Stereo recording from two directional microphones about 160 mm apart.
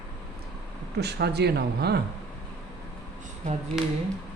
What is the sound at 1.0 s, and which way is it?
Speech, 90° right.